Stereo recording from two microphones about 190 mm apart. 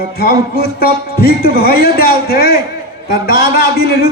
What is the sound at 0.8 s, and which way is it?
A man's voice, 55° left (ahead or behind).